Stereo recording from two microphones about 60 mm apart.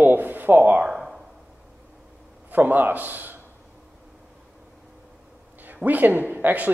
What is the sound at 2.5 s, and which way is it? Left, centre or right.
Speech, right.